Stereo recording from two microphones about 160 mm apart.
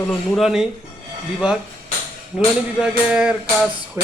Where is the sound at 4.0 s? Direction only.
15° right (ahead or behind).